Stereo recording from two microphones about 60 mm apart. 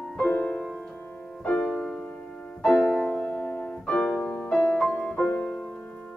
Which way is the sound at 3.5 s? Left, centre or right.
Left.